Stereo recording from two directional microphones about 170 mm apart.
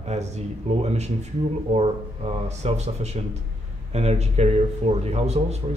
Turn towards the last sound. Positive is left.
turn(degrees=-40)  # may be behind; listen again after turning